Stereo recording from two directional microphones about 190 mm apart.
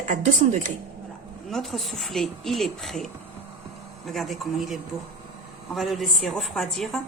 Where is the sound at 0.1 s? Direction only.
40° right (ahead or behind).